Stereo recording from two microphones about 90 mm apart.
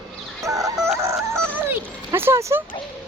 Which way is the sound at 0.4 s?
35° right (ahead or behind).